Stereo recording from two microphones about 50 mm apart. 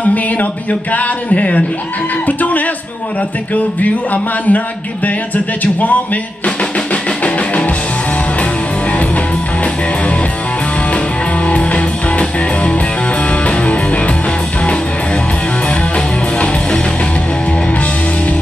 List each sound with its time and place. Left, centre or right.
0.0 s speech: left
2.2 s music: left
3.5 s speech: left
6.4 s drum: left
11.4 s music: left